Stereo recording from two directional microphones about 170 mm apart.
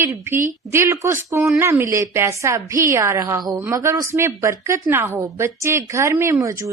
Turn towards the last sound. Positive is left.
turn(degrees=-20)  # may be behind; listen again after turning